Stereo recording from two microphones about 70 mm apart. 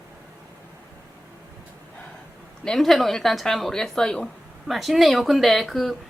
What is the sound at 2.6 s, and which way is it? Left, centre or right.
Speech, centre.